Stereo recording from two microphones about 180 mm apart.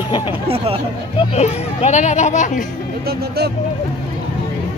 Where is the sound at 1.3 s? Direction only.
35° left (ahead or behind).